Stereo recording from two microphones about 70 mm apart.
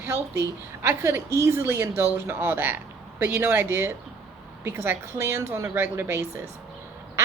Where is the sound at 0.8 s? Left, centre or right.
Right.